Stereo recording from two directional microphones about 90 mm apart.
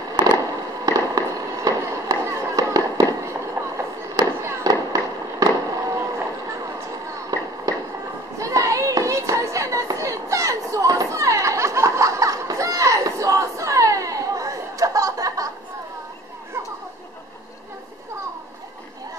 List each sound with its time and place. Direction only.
0.1 s fireworks: 50° right (ahead or behind)
4.6 s fireworks: 45° right (ahead or behind)
7.7 s a sound: 45° right (ahead or behind)
8.4 s children playing: 40° right (ahead or behind)